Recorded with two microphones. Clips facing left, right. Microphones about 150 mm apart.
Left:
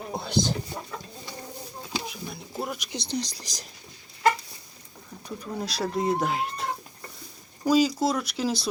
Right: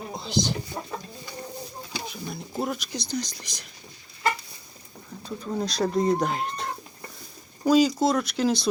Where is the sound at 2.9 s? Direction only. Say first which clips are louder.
Even; 30° left (ahead or behind).